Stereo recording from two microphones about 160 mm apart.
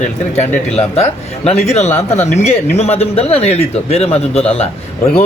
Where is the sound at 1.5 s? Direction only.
40° left (ahead or behind).